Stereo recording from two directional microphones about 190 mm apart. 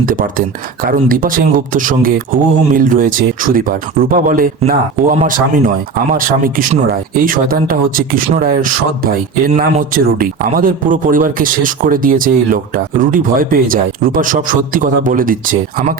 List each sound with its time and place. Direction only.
0.0 s speech: 45° right (ahead or behind)